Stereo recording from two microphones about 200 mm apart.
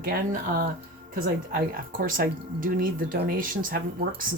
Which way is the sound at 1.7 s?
45° right (ahead or behind).